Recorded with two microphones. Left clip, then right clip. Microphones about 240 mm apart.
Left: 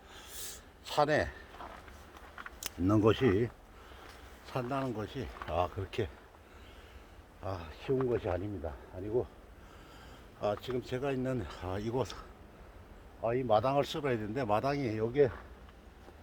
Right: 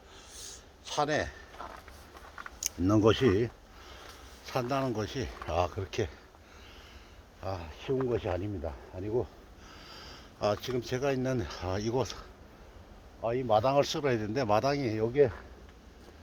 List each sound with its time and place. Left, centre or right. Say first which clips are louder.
0.3 s a sound: right 2 dB; left
2.6 s speech: right 3 dB; centre; by 3.9 s right
4.4 s speech: right 4 dB; right
7.4 s a man's voice: right 2 dB; right
13.2 s a man's voice: right 2 dB; right